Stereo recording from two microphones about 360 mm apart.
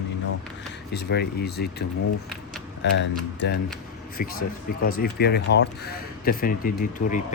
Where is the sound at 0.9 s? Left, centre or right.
Left.